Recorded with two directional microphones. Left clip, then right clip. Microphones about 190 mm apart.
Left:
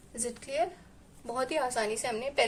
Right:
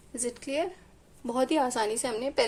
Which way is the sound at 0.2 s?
25° right (ahead or behind).